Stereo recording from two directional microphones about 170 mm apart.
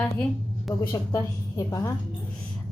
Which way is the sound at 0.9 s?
20° left (ahead or behind).